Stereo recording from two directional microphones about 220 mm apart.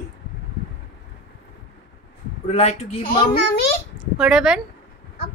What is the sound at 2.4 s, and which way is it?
Speech, 30° left (ahead or behind).